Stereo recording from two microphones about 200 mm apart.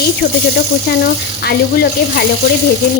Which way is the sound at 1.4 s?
50° left (ahead or behind).